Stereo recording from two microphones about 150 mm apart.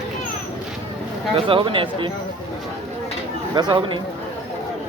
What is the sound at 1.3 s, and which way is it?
Speech, 35° right (ahead or behind).